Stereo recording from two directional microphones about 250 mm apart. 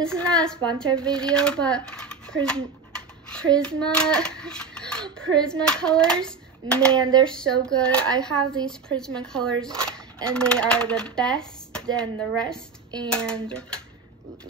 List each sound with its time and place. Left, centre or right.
0.0 s a woman's voice: centre
7.0 s a sound: centre
7.6 s speech: centre